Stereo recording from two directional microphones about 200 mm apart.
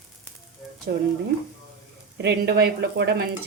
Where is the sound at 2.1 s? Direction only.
55° right (ahead or behind).